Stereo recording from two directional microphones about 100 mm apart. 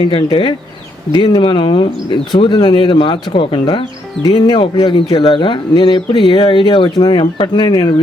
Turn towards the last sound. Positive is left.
turn(degrees=50)  # may be behind; listen again after turning